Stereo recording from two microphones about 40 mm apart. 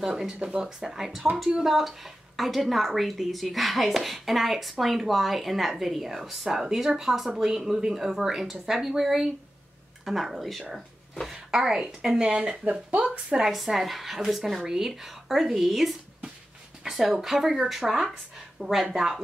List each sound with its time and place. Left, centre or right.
0.0 s a woman's voice: centre
11.3 s a woman's voice: centre; by 13.2 s right
13.5 s a woman's voice: centre
16.9 s a woman's voice: centre